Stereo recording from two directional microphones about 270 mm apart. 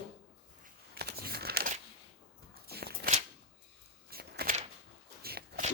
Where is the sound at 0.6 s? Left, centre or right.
Right.